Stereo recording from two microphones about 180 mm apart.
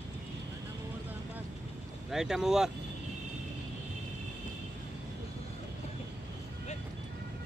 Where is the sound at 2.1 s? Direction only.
Centre (ahead or behind).